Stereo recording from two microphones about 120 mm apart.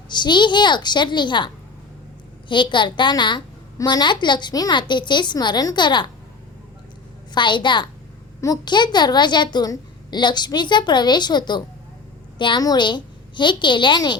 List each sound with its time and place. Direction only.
0.1 s a woman's voice: 40° left (ahead or behind)
2.5 s a woman's voice: 40° left (ahead or behind)
7.3 s a woman's voice: 40° left (ahead or behind)